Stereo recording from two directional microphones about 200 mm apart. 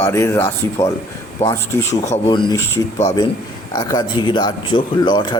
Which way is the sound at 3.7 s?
20° left (ahead or behind).